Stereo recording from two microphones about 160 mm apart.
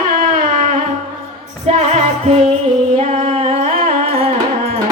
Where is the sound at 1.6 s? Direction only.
40° right (ahead or behind).